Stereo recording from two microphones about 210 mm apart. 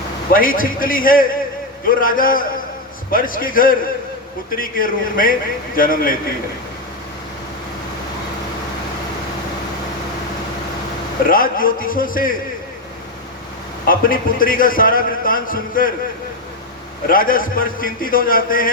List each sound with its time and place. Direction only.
0.3 s a man's voice: 40° left (ahead or behind)
11.3 s a man's voice: 40° left (ahead or behind)
13.8 s a man's voice: 40° left (ahead or behind)
17.1 s a man's voice: 40° left (ahead or behind)